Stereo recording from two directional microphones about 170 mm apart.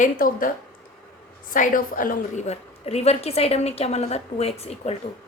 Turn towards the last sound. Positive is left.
turn(degrees=35)  # may be behind; listen again after turning